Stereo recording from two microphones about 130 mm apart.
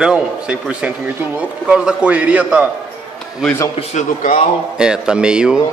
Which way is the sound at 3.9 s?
90° left.